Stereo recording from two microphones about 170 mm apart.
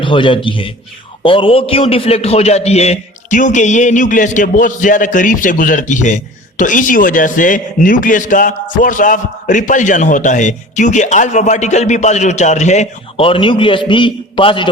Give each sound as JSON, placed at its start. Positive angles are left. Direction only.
{"t": 0.0, "sound": "a man's voice", "side_deg": 30}